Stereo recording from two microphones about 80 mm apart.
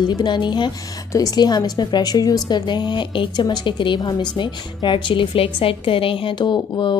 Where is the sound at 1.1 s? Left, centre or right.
Left.